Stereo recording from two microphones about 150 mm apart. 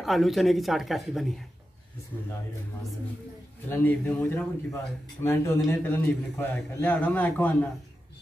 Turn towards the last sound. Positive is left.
turn(degrees=10)  # may be behind; listen again after turning